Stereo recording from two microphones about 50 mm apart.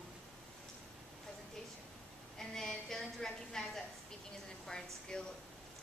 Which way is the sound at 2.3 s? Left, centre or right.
Centre.